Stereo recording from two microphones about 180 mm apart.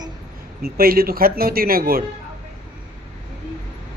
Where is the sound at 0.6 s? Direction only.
55° right (ahead or behind).